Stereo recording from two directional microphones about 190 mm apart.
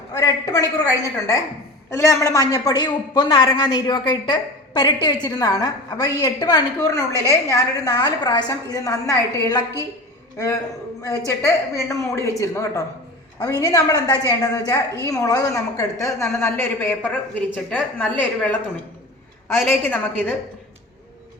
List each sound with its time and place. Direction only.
0.2 s a woman's voice: 15° left (ahead or behind)
11.3 s a woman's voice: 15° left (ahead or behind)